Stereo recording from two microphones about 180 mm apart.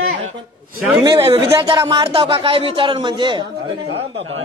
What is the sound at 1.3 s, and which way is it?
A man's voice, 30° right (ahead or behind).